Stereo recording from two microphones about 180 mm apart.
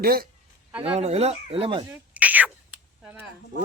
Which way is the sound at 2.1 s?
10° right (ahead or behind).